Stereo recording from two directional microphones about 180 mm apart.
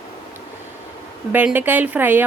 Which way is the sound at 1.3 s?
10° right (ahead or behind).